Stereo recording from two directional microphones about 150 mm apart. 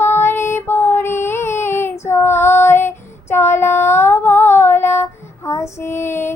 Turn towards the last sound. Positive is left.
turn(degrees=15)  # may be behind; listen again after turning